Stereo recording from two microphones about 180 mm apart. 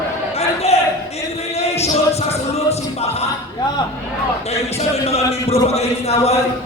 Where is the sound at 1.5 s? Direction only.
35° left (ahead or behind).